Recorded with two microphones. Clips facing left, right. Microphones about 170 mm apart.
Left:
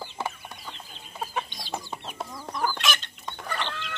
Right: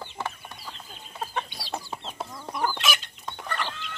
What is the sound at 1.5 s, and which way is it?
Chicken, 5° right (ahead or behind).